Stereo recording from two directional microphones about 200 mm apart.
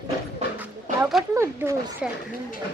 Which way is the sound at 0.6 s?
5° right (ahead or behind).